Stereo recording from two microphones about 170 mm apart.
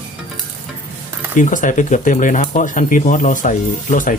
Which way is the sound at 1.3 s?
50° left (ahead or behind).